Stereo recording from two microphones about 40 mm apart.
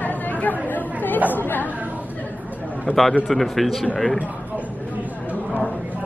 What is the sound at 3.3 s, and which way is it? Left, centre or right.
Speech, centre.